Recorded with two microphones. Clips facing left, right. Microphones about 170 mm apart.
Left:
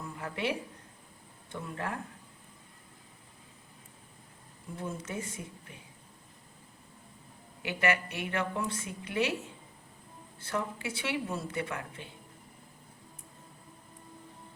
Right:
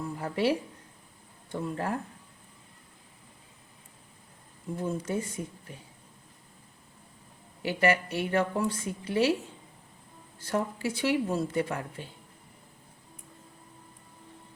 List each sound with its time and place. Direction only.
0.2 s a woman's voice: 35° right (ahead or behind)
1.5 s a woman's voice: 35° right (ahead or behind)
4.8 s a woman's voice: 35° right (ahead or behind)
7.6 s a woman's voice: 35° right (ahead or behind)
10.4 s a woman's voice: 40° right (ahead or behind)